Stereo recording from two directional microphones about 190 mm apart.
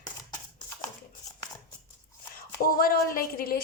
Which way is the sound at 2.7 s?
50° left (ahead or behind).